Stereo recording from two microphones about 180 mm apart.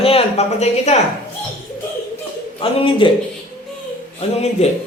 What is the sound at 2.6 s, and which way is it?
Speech, 30° left (ahead or behind).